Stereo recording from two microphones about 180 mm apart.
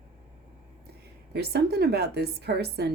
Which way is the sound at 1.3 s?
65° right (ahead or behind).